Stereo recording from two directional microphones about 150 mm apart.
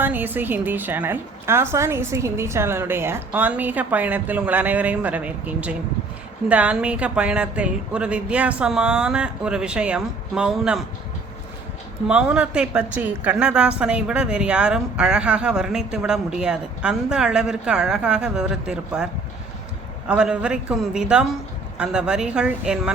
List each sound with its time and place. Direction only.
0.0 s a woman's voice: 10° right (ahead or behind)
12.0 s a woman's voice: 5° right (ahead or behind)
20.1 s a woman's voice: 5° right (ahead or behind)